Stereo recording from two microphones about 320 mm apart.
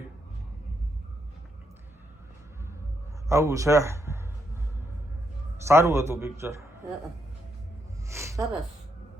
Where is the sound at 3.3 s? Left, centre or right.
Centre.